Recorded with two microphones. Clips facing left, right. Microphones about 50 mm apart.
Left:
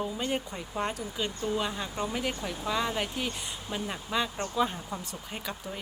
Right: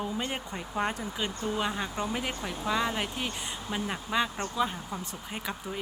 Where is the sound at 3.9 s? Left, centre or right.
Centre.